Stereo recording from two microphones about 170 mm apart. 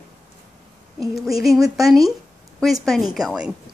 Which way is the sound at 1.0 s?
Centre (ahead or behind).